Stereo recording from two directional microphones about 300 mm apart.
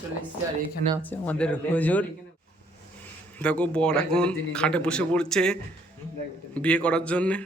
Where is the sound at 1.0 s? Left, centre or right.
Centre.